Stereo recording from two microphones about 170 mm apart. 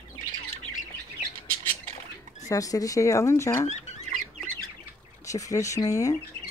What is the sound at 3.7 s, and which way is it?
Rodents, 40° left (ahead or behind).